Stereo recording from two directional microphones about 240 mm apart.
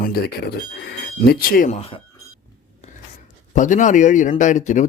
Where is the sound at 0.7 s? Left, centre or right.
Left.